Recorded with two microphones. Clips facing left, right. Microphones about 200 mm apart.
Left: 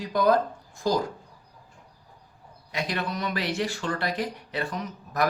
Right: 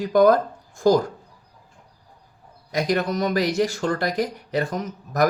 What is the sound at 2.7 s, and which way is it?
Speech, 40° right (ahead or behind).